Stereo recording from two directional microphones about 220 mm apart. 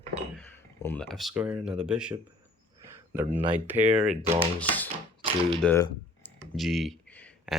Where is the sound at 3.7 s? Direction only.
30° right (ahead or behind).